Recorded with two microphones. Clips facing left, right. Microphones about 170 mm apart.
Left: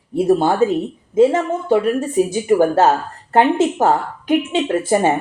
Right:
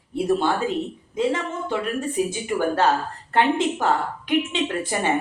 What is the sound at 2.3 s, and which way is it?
Speech, 45° left (ahead or behind).